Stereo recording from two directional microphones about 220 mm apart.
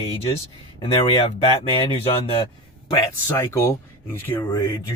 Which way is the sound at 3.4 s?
10° left (ahead or behind).